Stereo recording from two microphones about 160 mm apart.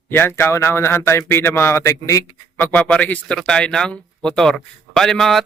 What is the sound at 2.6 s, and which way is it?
Speech, 5° left (ahead or behind).